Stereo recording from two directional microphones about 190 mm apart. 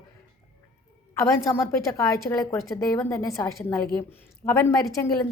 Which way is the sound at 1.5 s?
15° left (ahead or behind).